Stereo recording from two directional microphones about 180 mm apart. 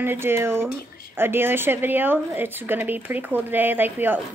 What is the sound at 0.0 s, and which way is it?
Speech, 10° right (ahead or behind).